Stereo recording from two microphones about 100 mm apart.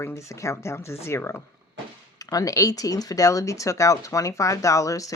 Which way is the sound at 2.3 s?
35° left (ahead or behind).